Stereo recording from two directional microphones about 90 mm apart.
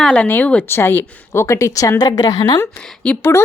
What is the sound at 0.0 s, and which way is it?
A woman's voice, 15° left (ahead or behind).